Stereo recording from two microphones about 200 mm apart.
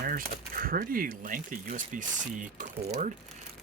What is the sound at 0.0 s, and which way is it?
Speech, 45° right (ahead or behind).